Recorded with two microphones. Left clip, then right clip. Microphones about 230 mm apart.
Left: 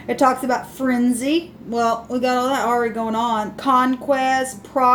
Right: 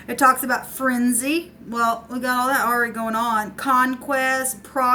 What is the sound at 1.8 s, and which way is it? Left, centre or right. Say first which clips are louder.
Speech: left 2 dB; right.